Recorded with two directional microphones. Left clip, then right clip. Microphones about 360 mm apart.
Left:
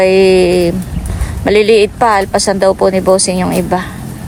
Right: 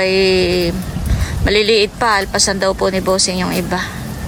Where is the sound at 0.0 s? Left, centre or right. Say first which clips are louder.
Left 6 dB; centre.